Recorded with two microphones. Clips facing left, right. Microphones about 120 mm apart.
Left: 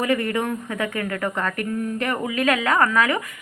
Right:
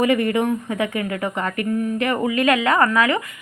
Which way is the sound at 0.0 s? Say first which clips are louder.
Right 4 dB; 20° right (ahead or behind).